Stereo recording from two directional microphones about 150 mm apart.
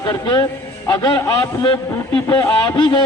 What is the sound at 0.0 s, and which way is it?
A man's voice, 25° left (ahead or behind).